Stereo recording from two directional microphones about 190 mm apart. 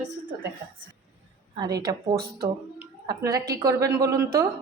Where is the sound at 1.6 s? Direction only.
20° right (ahead or behind).